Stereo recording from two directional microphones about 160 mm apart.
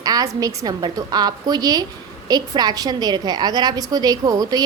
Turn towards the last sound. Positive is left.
turn(degrees=-25)  # may be behind; listen again after turning